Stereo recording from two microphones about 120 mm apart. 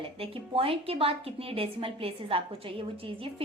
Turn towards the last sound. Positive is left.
turn(degrees=-50)  # may be behind; listen again after turning